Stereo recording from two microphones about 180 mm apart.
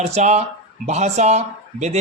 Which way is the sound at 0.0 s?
40° right (ahead or behind).